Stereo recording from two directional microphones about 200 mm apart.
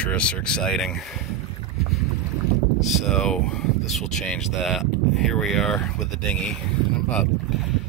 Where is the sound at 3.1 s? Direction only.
5° left (ahead or behind).